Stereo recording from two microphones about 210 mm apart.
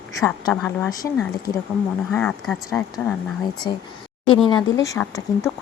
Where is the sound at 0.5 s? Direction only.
5° left (ahead or behind).